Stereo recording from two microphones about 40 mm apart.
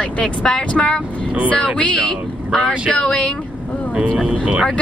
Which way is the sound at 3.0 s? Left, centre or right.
Left.